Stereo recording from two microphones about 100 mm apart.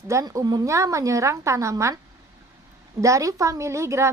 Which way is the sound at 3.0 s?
35° right (ahead or behind).